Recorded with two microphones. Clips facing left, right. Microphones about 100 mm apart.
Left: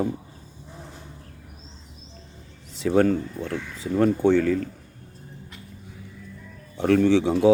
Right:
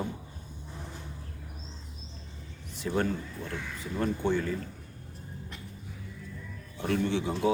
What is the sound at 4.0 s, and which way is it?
Speech, 80° left.